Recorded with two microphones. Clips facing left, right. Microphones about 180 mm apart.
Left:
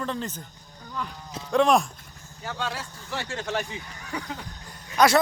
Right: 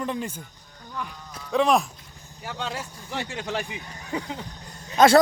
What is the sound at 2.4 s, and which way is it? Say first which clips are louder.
A man's voice: even; 20° right (ahead or behind).